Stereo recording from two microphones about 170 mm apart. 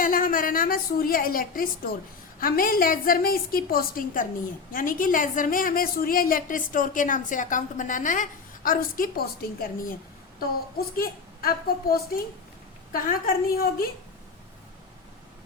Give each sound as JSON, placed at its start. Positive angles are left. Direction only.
{"t": 0.0, "sound": "a woman's voice", "side_deg": 55}